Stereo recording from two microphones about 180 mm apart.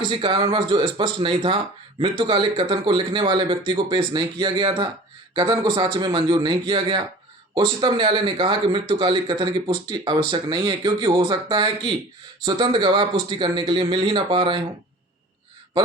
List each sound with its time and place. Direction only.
0.1 s speech: 25° right (ahead or behind)